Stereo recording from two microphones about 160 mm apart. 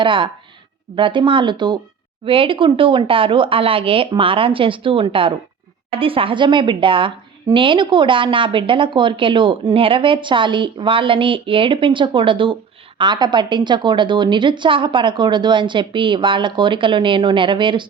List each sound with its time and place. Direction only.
0.0 s a woman's voice: 30° right (ahead or behind)